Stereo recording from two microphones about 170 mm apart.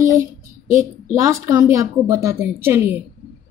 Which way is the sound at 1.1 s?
20° right (ahead or behind).